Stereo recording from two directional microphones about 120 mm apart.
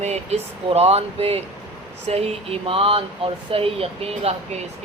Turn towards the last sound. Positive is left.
turn(degrees=-60)  # may be behind; listen again after turning